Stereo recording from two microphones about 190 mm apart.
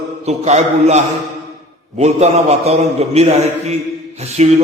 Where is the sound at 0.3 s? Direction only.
35° right (ahead or behind).